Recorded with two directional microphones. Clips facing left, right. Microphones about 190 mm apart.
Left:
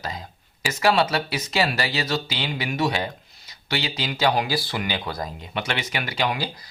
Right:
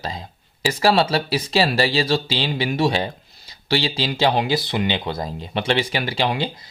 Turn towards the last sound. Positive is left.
turn(degrees=-25)  # may be behind; listen again after turning